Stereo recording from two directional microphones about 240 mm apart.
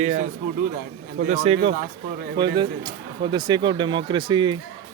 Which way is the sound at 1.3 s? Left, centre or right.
Right.